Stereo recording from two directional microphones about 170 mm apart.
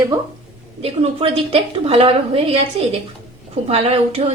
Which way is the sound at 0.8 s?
35° right (ahead or behind).